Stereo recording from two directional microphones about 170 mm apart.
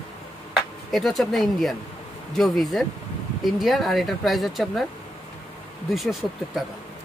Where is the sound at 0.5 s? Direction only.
Centre (ahead or behind).